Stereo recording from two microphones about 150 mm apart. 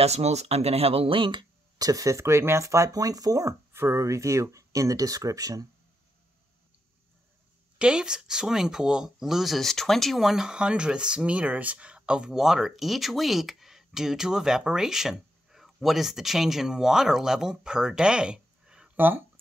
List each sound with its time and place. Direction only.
0.0 s speech: 45° right (ahead or behind); by 5.7 s 25° right (ahead or behind)
7.8 s speech: 5° right (ahead or behind)